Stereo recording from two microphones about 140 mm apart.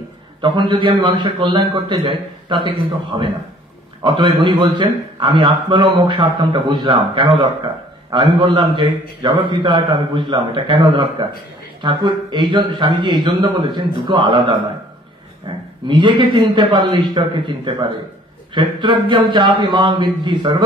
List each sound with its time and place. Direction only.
0.4 s a man's voice: 35° right (ahead or behind)